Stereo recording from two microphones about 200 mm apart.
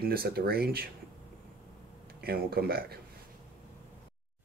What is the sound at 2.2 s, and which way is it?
Speech, 50° right (ahead or behind).